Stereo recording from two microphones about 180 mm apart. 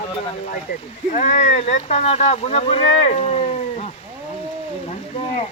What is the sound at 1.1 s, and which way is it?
Speech, 40° left (ahead or behind).